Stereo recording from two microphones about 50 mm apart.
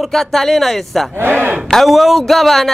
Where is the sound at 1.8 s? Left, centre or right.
Centre.